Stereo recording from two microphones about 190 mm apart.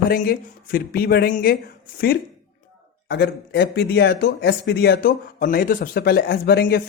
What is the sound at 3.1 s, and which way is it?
Speech, 60° left (ahead or behind).